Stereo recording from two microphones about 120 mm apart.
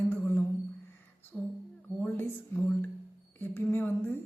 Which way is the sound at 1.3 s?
10° left (ahead or behind).